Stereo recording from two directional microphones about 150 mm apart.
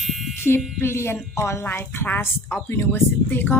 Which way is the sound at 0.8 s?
15° left (ahead or behind).